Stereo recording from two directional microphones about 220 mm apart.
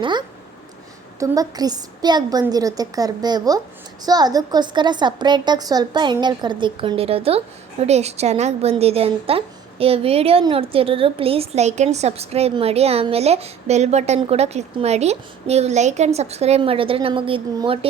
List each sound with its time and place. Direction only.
0.0 s a woman's voice: 20° right (ahead or behind)